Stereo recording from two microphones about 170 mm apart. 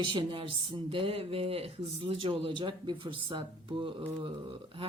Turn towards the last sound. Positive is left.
turn(degrees=-30)  # may be behind; listen again after turning